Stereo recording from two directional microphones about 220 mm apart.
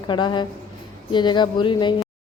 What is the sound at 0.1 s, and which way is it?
Speech, 20° left (ahead or behind).